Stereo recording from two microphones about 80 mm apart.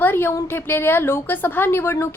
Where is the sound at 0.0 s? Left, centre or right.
Left.